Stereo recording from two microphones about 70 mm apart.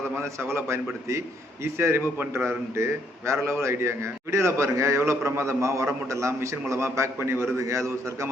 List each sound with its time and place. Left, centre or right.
0.3 s a man's voice: right